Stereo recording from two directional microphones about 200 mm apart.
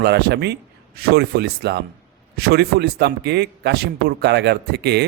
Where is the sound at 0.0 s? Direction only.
55° right (ahead or behind).